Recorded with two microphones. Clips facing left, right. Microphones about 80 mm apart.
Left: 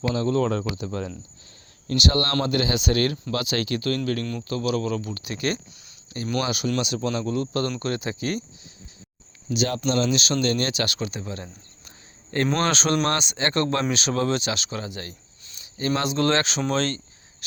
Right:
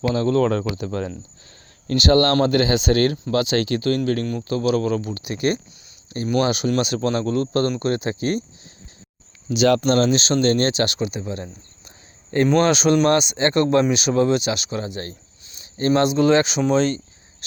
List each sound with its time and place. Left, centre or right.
0.0 s speech: right
0.8 s speech: right
1.9 s speech: right
5.0 s speech: right
6.7 s speech: right
7.8 s speech: right
9.5 s speech: right
9.8 s speech: right
10.2 s speech: right
12.5 s speech: centre
16.1 s speech: centre